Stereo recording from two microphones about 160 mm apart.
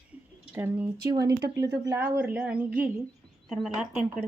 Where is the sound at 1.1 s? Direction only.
25° right (ahead or behind).